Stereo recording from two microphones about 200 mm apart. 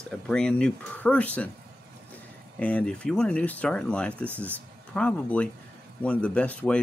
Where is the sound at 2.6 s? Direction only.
5° left (ahead or behind).